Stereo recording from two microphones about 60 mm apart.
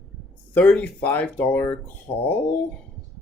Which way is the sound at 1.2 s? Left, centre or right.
Centre.